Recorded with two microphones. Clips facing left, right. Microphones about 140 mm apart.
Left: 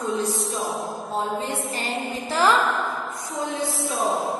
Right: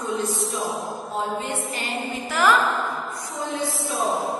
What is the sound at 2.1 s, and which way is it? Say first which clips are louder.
Music: even; 30° left (ahead or behind).